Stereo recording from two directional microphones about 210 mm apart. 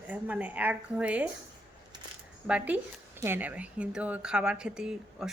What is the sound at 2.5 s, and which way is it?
Speech, 5° right (ahead or behind).